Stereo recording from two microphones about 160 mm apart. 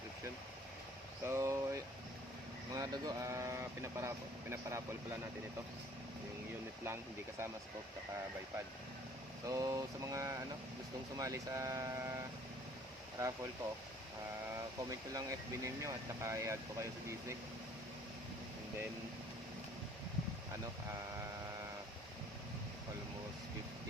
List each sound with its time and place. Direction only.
1.2 s a sound: 15° right (ahead or behind)
2.7 s speech: 20° right (ahead or behind)
6.8 s speech: 15° right (ahead or behind)
9.5 s speech: 20° right (ahead or behind)
14.8 s speech: 20° right (ahead or behind)